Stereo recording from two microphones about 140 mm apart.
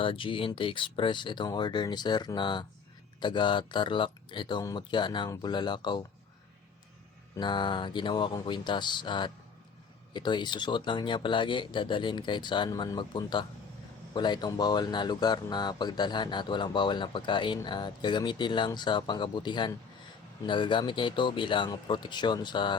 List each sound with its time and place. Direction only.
0.0 s speech: 40° left (ahead or behind)
7.3 s speech: 35° left (ahead or behind)